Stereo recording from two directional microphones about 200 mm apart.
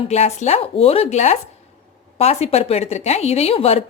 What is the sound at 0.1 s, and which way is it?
A woman's voice, 35° left (ahead or behind).